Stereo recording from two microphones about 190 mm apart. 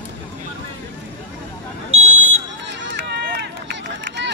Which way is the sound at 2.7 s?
70° right (ahead or behind).